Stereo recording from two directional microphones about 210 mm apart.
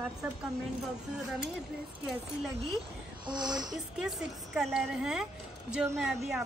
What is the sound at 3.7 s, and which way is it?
A woman's voice, 5° right (ahead or behind).